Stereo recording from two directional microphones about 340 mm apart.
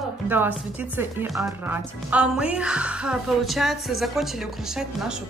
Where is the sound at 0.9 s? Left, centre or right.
Centre.